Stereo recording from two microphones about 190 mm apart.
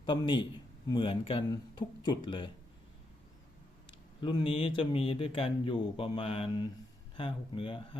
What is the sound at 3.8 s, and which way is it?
Speech, 25° left (ahead or behind).